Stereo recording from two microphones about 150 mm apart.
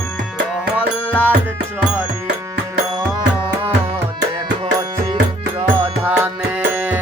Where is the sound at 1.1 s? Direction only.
10° left (ahead or behind).